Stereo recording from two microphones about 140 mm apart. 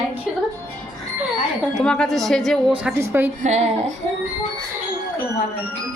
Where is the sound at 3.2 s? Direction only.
55° right (ahead or behind).